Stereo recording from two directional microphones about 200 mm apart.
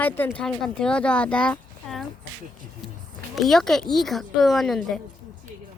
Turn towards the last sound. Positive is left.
turn(degrees=0)  # may be behind; listen again after turning